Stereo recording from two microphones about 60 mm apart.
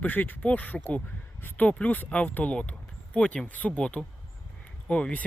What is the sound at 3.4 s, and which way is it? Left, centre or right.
Speech, left.